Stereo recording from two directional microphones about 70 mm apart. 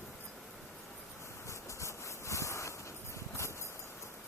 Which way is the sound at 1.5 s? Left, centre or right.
Left.